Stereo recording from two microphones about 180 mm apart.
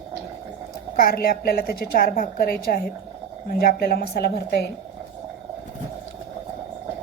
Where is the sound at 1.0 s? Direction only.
55° left (ahead or behind).